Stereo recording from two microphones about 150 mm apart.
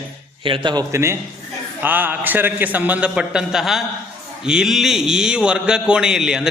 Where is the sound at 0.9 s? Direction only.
20° right (ahead or behind).